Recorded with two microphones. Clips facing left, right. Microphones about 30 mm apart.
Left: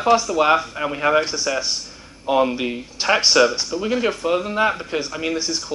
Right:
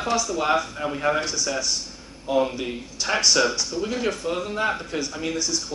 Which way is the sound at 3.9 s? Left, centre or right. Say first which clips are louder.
Left 8 dB; centre.